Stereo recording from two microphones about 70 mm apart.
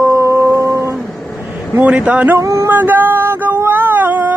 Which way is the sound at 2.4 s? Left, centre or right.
Right.